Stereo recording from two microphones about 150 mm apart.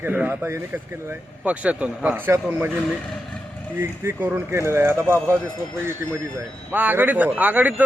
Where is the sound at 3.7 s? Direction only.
15° right (ahead or behind).